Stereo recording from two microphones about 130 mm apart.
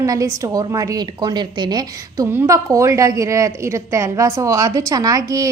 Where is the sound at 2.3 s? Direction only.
20° right (ahead or behind).